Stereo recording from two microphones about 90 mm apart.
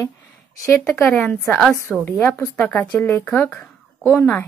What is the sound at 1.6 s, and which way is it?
Speech, 5° left (ahead or behind).